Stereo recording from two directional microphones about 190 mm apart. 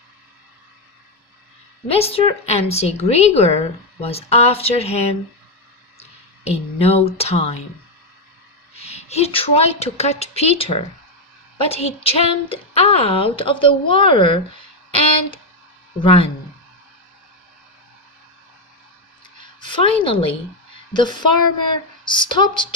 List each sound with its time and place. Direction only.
1.9 s a woman's voice: 30° left (ahead or behind)
8.7 s a woman's voice: 35° left (ahead or behind)
16.0 s a woman's voice: 30° left (ahead or behind)
19.5 s a woman's voice: 25° left (ahead or behind)